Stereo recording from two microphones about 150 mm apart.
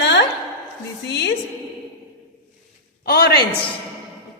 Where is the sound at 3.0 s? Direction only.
90° left.